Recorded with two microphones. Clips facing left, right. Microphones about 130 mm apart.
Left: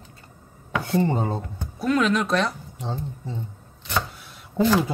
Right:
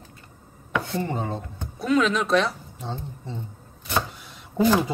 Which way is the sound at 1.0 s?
30° left (ahead or behind).